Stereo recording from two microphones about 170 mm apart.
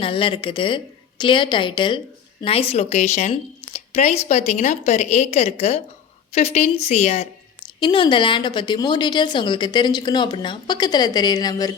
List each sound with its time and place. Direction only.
0.0 s a woman's voice: 30° left (ahead or behind)
7.6 s a woman's voice: 25° left (ahead or behind)